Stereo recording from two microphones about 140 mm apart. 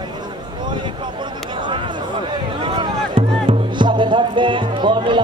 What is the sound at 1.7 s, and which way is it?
Music, 35° right (ahead or behind).